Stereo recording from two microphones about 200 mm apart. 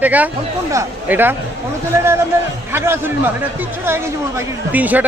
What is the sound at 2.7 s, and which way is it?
Speech, 10° right (ahead or behind).